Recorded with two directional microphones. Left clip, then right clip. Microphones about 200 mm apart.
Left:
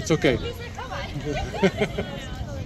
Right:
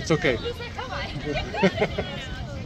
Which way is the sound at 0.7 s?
20° right (ahead or behind).